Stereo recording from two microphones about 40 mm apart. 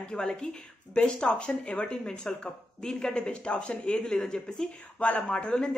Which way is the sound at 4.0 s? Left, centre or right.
Centre.